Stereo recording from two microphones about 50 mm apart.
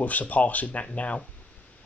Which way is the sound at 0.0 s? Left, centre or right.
Left.